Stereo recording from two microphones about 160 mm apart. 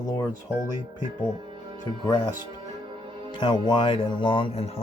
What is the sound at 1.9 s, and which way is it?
Speech, 30° left (ahead or behind).